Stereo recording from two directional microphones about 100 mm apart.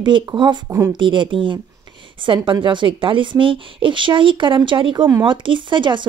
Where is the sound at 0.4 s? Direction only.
50° right (ahead or behind).